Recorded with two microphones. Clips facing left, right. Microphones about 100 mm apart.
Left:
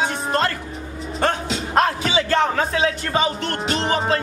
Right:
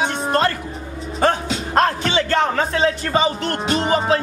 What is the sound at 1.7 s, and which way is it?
Speech, 5° left (ahead or behind).